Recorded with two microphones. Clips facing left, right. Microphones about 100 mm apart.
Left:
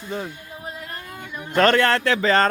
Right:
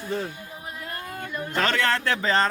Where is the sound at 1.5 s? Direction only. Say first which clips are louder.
Left 7 dB; 55° left (ahead or behind).